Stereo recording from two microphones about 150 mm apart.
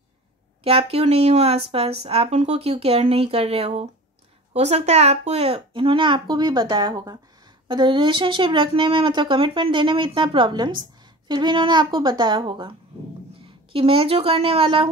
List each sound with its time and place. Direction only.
0.7 s a woman's voice: 40° right (ahead or behind)
13.7 s a woman's voice: 35° right (ahead or behind)